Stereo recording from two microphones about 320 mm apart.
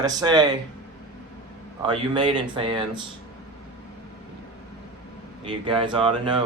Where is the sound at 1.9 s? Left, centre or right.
Centre.